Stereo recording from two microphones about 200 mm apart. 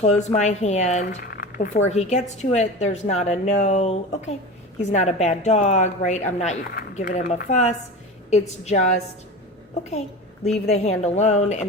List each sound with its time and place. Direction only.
0.0 s a woman's voice: 35° left (ahead or behind)
10.5 s a woman's voice: 35° left (ahead or behind)